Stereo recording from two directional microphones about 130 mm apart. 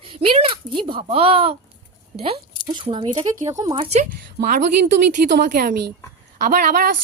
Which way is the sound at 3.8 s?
55° right (ahead or behind).